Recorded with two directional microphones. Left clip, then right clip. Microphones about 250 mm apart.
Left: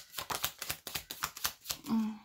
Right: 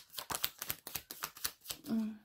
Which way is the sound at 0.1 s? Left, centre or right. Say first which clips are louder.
Left 3 dB; right.